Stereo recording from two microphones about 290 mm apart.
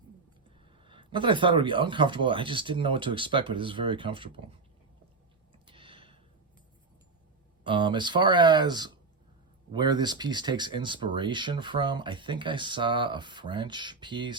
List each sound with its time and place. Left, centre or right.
0.9 s speech: centre
5.6 s a sound: centre
7.6 s speech: centre